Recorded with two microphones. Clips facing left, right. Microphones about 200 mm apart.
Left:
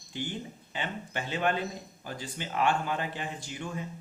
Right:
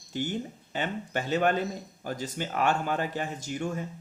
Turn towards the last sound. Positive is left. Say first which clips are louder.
# right 5 dB
turn(degrees=-45)  # may be behind; listen again after turning